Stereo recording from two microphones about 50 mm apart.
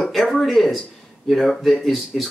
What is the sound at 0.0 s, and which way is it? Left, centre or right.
Speech, centre.